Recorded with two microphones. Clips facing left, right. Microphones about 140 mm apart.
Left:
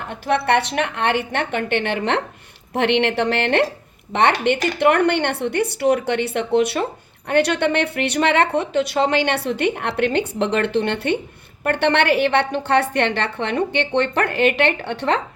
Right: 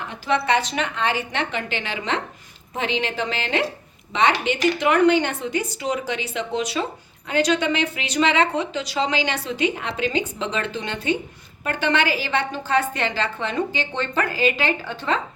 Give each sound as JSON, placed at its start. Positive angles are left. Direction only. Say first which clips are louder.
{"t": 0.1, "sound": "a woman's voice", "louder": "left 3 dB", "side_deg": 60}